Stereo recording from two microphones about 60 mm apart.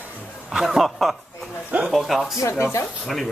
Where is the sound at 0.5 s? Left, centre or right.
Centre.